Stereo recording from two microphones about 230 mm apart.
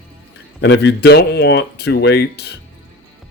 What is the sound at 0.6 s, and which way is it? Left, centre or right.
Speech, left.